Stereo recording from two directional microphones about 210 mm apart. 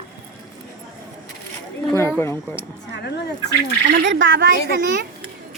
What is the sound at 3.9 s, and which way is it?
Speech, 55° right (ahead or behind).